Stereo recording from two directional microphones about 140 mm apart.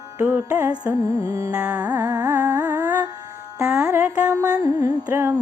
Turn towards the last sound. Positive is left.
turn(degrees=-15)  # may be behind; listen again after turning